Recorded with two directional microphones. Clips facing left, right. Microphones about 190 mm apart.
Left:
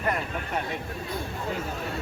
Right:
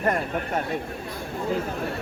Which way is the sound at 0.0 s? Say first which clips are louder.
Right 4 dB; 45° right (ahead or behind).